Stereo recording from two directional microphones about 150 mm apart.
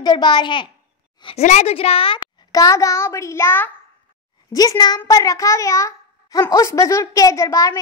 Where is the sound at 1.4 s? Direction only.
50° left (ahead or behind).